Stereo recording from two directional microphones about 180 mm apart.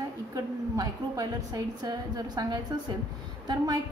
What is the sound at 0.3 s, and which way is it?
A woman's voice, 20° right (ahead or behind).